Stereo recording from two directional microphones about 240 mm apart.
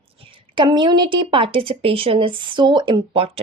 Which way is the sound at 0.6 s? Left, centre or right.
Centre.